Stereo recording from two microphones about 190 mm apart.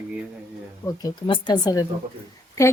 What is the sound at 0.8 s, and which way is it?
Speech, 25° left (ahead or behind).